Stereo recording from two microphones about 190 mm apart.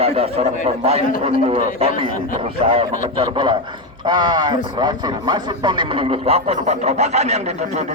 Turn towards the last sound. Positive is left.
turn(degrees=-35)  # may be behind; listen again after turning